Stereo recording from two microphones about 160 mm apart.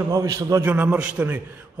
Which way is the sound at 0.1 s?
20° right (ahead or behind).